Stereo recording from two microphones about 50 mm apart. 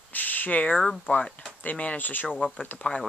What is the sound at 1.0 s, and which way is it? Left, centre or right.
Speech, left.